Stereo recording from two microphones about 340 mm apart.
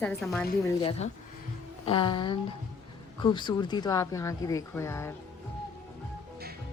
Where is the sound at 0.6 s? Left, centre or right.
Centre.